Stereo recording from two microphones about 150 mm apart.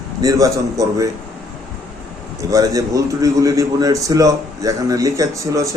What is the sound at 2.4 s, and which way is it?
A man's voice, 25° right (ahead or behind).